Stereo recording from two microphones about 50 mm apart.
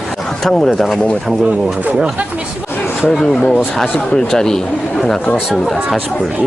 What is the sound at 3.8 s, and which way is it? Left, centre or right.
Speech, centre.